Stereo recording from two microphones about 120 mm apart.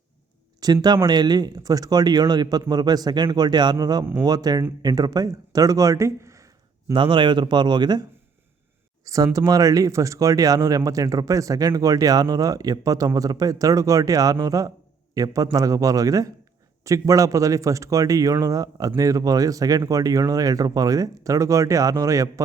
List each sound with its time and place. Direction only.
0.6 s a man's voice: 35° right (ahead or behind)
6.9 s a man's voice: 45° right (ahead or behind)
9.0 s speech: 30° right (ahead or behind)